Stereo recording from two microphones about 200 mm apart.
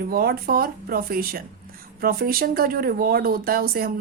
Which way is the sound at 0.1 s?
50° right (ahead or behind).